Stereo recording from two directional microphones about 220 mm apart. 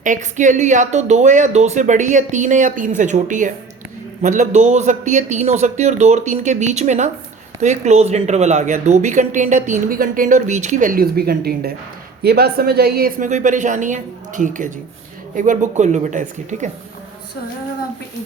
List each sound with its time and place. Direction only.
0.0 s speech: 35° right (ahead or behind)